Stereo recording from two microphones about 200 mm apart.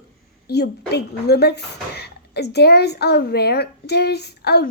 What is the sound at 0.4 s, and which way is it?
A woman's voice, 55° left (ahead or behind).